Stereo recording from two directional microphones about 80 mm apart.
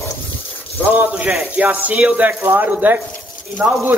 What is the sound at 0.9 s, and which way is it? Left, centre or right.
A man's voice, centre.